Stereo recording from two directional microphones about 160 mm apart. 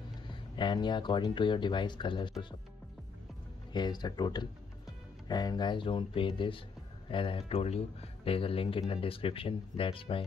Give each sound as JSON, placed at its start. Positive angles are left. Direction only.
{"t": 0.3, "sound": "speech", "side_deg": 30}
{"t": 3.7, "sound": "speech", "side_deg": 25}